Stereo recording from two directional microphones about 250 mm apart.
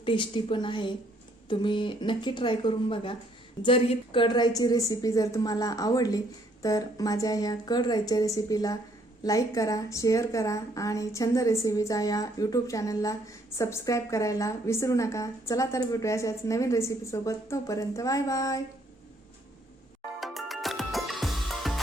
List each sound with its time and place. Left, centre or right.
0.0 s a woman's voice: centre
20.1 s music: centre